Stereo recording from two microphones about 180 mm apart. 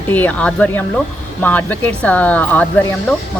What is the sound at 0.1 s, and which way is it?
Speech, 10° left (ahead or behind).